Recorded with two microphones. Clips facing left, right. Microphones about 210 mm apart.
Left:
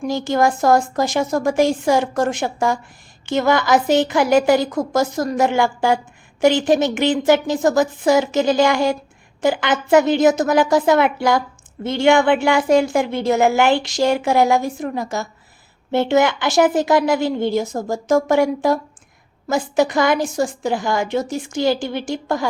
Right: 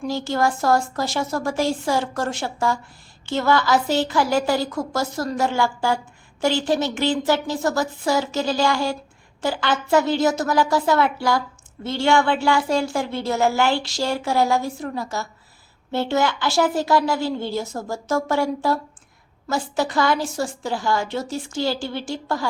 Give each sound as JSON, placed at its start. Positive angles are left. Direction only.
{"t": 0.0, "sound": "a woman's voice", "side_deg": 15}